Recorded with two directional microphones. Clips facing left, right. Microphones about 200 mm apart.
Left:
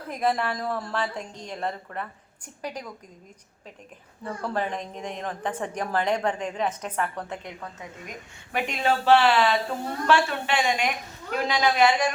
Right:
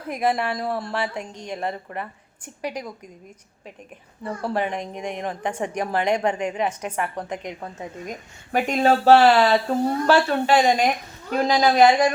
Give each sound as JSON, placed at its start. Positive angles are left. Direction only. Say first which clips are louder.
{"t": 0.1, "sound": "a woman's voice", "louder": "right 3 dB", "side_deg": -10}
{"t": 4.2, "sound": "a woman's voice", "louder": "right 4 dB", "side_deg": -10}
{"t": 7.6, "sound": "a woman's voice", "louder": "right 6 dB", "side_deg": -30}
{"t": 8.5, "sound": "speech", "louder": "right 6 dB", "side_deg": -45}